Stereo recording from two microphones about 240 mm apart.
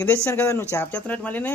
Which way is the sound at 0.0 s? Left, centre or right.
Centre.